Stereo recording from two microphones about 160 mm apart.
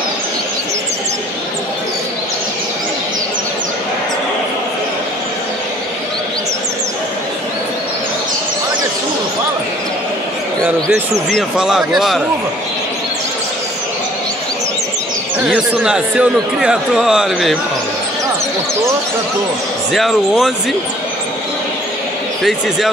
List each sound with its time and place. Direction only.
10.9 s a man's voice: centre (ahead or behind)
15.4 s a man's voice: 5° right (ahead or behind)
19.9 s a man's voice: centre (ahead or behind)
22.4 s a man's voice: centre (ahead or behind)